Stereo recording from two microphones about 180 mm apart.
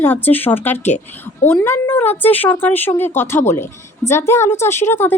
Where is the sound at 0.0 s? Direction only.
10° left (ahead or behind).